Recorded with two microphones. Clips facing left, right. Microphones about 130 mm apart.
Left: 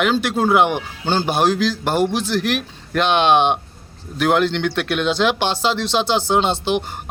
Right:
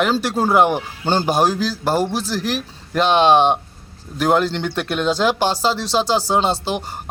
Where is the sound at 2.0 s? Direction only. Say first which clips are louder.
Left 2 dB; 35° right (ahead or behind).